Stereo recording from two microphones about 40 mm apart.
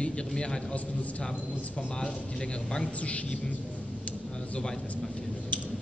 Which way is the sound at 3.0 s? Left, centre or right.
Left.